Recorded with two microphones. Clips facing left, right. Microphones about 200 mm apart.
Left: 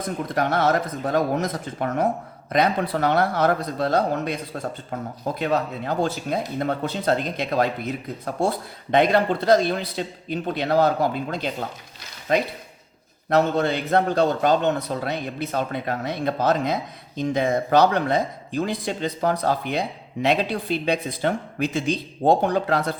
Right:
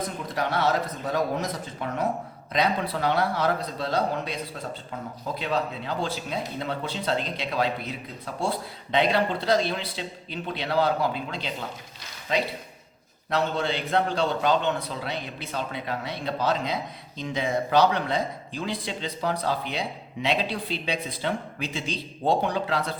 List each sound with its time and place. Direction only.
0.3 s speech: 50° left (ahead or behind)
5.4 s speech: 50° left (ahead or behind)